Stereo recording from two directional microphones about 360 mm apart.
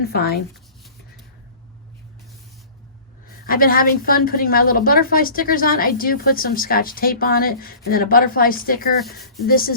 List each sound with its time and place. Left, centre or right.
0.0 s a woman's voice: left
3.4 s a woman's voice: left